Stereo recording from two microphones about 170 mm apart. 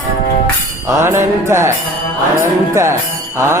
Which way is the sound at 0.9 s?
15° right (ahead or behind).